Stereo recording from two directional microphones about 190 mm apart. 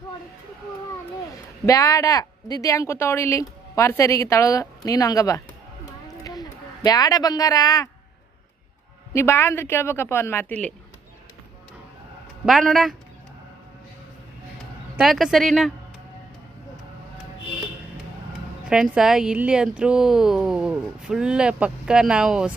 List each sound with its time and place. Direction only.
1.6 s a woman's voice: 15° left (ahead or behind)
6.8 s speech: 20° left (ahead or behind)
9.1 s a woman's voice: 15° left (ahead or behind)
12.5 s speech: centre (ahead or behind)
14.9 s speech: centre (ahead or behind)
18.7 s speech: 5° right (ahead or behind)